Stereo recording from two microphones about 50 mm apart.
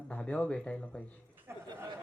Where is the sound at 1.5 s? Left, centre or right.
Right.